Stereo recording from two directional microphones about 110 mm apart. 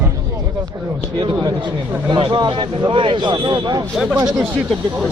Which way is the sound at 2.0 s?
45° right (ahead or behind).